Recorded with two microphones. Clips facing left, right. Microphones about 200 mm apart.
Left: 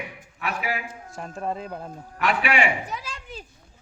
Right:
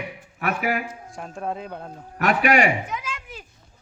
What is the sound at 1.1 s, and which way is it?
Speech, centre (ahead or behind).